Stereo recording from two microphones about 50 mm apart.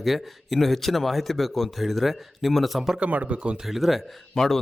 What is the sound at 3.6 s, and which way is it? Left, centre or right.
Speech, centre.